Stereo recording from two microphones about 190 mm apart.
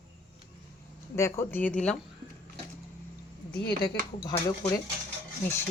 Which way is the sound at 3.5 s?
55° left (ahead or behind).